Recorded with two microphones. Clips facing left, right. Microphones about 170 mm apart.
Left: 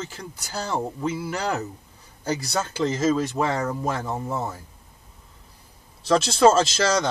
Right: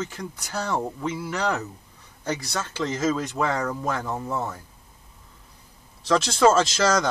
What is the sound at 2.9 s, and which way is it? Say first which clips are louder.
Speech: left 2 dB; 5° left (ahead or behind).